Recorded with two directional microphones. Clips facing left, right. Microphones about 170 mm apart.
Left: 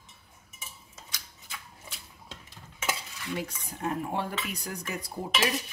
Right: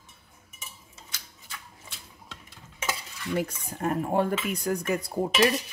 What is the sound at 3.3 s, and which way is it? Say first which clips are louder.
Dishes: right 8 dB; 45° right (ahead or behind).